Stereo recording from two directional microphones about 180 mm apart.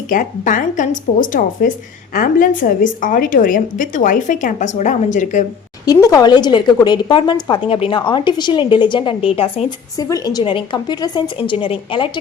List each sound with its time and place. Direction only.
0.1 s a woman's voice: 45° left (ahead or behind)
5.8 s a woman's voice: 20° left (ahead or behind)
10.0 s a woman's voice: 20° left (ahead or behind)